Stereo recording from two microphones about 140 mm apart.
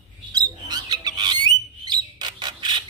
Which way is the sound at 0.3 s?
30° right (ahead or behind).